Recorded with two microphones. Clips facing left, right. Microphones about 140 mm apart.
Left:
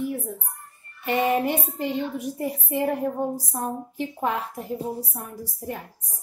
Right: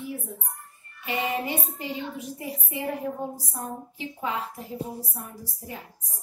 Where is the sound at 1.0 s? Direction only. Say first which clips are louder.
Left 6 dB; 60° left (ahead or behind).